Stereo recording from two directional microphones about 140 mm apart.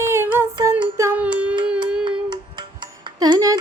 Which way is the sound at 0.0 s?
20° right (ahead or behind).